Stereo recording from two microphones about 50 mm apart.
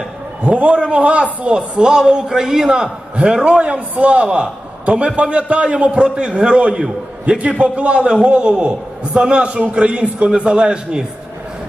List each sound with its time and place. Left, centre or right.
0.4 s a man's voice: right